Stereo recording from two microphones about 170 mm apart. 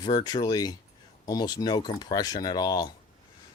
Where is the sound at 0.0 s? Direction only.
25° left (ahead or behind).